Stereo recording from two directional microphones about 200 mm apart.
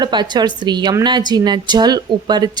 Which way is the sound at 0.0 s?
20° right (ahead or behind).